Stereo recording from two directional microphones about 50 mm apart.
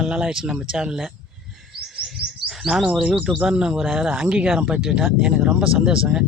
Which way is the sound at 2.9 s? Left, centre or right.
Centre.